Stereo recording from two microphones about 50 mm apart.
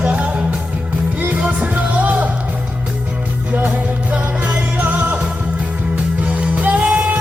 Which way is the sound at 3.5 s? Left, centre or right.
Right.